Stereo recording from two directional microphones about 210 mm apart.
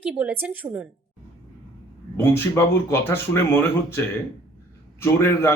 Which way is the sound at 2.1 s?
10° left (ahead or behind).